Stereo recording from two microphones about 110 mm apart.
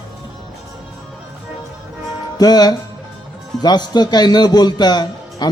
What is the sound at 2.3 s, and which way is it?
A man's voice, 35° left (ahead or behind).